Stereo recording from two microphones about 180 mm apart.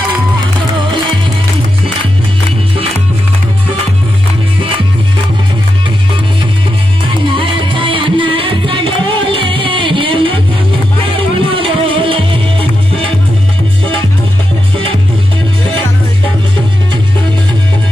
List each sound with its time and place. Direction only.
7.2 s music: 30° right (ahead or behind)